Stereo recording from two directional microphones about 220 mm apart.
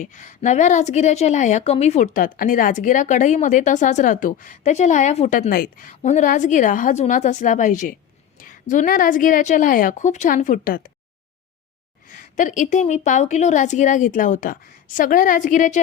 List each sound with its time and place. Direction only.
0.0 s a woman's voice: 35° left (ahead or behind)
5.4 s a woman's voice: 45° left (ahead or behind)
12.0 s a woman's voice: 40° left (ahead or behind)